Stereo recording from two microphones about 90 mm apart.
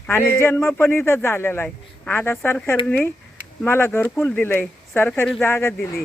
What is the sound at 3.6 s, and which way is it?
Speech, 25° left (ahead or behind).